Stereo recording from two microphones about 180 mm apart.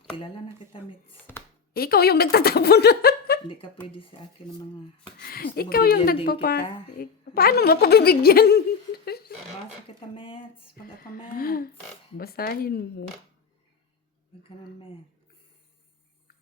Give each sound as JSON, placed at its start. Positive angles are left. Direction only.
{"t": 0.1, "sound": "speech", "side_deg": 30}
{"t": 1.7, "sound": "a woman's voice", "side_deg": 55}
{"t": 5.2, "sound": "a woman's voice", "side_deg": 55}
{"t": 10.2, "sound": "speech", "side_deg": 30}
{"t": 11.3, "sound": "a woman's voice", "side_deg": 55}